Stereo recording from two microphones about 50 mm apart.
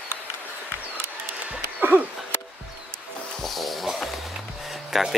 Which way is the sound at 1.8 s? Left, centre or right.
Right.